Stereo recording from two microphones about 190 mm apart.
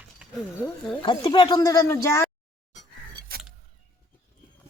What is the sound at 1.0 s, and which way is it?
Speech, 25° left (ahead or behind).